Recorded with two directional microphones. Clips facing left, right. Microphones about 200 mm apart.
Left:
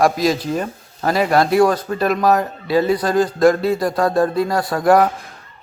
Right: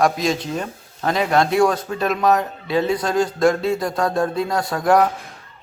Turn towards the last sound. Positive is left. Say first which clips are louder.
# left 3 dB
turn(degrees=0)  # may be behind; listen again after turning